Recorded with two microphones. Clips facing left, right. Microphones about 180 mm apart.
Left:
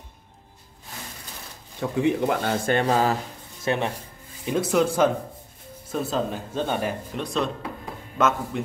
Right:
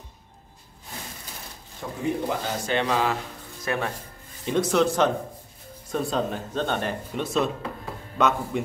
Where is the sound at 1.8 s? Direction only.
75° left (ahead or behind); by 3.2 s 40° left (ahead or behind).